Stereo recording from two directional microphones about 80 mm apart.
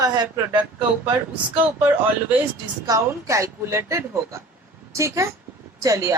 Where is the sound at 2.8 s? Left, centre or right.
Right.